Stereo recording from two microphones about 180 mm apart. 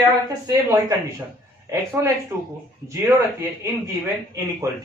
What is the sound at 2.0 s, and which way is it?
Speech, 15° right (ahead or behind).